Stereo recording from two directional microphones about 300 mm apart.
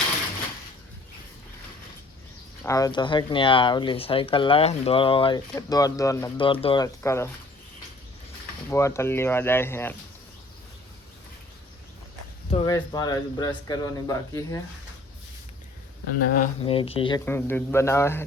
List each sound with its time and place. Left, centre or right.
2.6 s speech: centre
8.7 s speech: centre
12.6 s speech: centre
16.3 s speech: left